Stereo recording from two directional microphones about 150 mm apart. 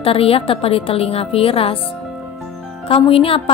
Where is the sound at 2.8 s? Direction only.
40° left (ahead or behind).